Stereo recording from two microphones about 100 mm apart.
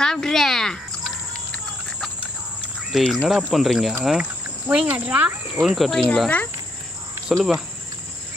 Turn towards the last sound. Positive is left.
turn(degrees=0)  # may be behind; listen again after turning